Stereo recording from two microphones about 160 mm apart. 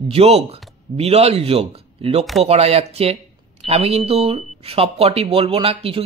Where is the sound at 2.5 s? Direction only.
40° right (ahead or behind).